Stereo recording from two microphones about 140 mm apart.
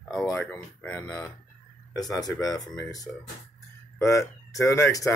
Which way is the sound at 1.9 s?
25° left (ahead or behind).